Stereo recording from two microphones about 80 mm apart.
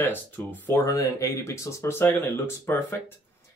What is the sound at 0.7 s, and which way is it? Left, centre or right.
Speech, left.